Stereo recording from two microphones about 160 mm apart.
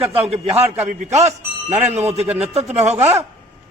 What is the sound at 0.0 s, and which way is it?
A man's voice, 40° right (ahead or behind).